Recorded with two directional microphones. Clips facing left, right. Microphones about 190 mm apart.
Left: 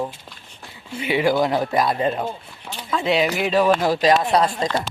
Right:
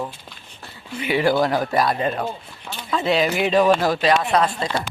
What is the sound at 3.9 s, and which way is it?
Speech, 35° left (ahead or behind).